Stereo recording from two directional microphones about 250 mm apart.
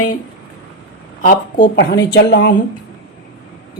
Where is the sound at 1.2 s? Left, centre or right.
Left.